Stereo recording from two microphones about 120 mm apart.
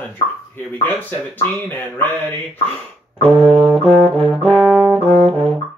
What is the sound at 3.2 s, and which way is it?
Brass instrument, 55° right (ahead or behind).